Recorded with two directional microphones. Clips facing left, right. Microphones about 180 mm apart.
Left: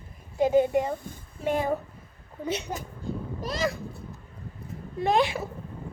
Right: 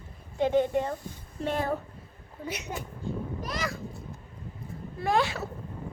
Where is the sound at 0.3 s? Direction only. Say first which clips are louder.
Left 3 dB; 10° left (ahead or behind).